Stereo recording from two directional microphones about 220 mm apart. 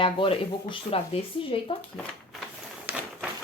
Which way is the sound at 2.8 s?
5° right (ahead or behind).